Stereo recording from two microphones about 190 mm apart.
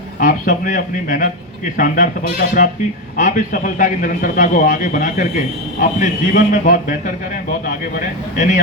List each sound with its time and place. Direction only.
0.2 s a man's voice: 45° left (ahead or behind)
3.2 s a man's voice: 45° left (ahead or behind)